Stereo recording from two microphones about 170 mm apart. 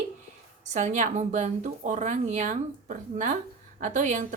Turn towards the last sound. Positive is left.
turn(degrees=-45)  # may be behind; listen again after turning